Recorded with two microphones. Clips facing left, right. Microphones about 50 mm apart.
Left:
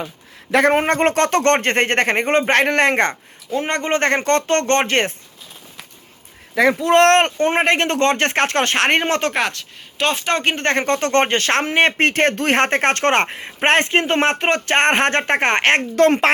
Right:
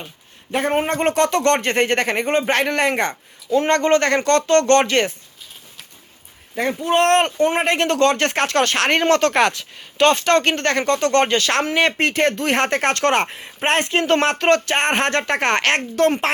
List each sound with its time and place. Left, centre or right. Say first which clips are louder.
0.5 s speech: left 5 dB; left
0.9 s speech: left 2 dB; left
3.6 s speech: right 4 dB; centre
4.0 s speech: even; left
6.6 s speech: left 5 dB; left
7.2 s speech: left 1 dB; left
9.5 s speech: right 3 dB; centre
10.2 s speech: right 3 dB; centre
10.6 s speech: even; left
14.0 s speech: even; left
14.7 s speech: left 3 dB; left